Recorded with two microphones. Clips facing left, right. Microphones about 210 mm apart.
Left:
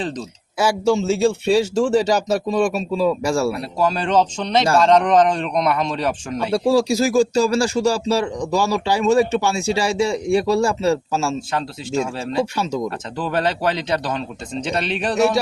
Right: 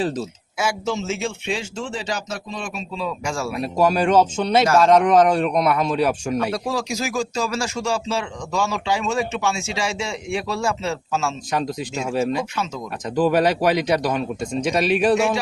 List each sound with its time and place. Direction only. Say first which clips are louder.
0.9 s speech: left 8 dB; 35° left (ahead or behind)
3.6 s speech: right 2 dB; 15° right (ahead or behind)
6.5 s speech: left 8 dB; 30° left (ahead or behind)
12.1 s speech: even; 15° right (ahead or behind)